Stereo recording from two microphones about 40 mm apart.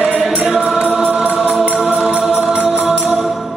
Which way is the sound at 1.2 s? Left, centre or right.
Right.